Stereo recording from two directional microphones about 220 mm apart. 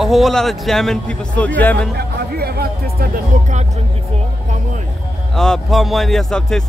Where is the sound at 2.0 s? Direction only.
45° right (ahead or behind).